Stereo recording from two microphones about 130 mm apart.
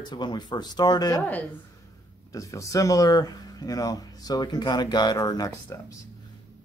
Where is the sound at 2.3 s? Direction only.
25° left (ahead or behind).